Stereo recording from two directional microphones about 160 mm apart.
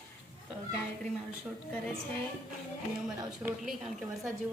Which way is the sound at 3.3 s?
5° right (ahead or behind).